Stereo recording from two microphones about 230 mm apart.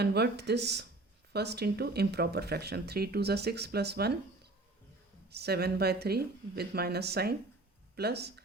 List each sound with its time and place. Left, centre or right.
0.0 s speech: right
5.3 s speech: right